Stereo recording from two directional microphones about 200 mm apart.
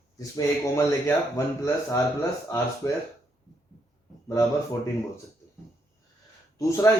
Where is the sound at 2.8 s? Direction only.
15° left (ahead or behind).